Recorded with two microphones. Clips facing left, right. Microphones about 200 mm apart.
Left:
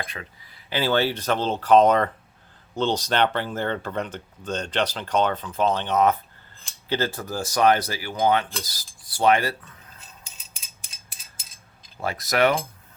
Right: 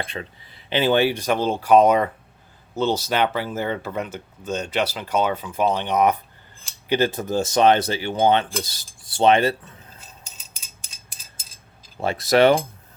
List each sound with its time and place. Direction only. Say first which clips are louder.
0.0 s speech: right 4 dB; 30° right (ahead or behind)
11.9 s speech: right 5 dB; 25° right (ahead or behind)